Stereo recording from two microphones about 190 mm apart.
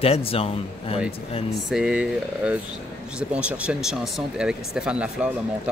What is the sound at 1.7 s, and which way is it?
Speech, 5° right (ahead or behind).